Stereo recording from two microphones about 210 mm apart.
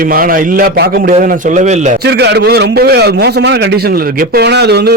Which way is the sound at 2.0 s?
55° right (ahead or behind).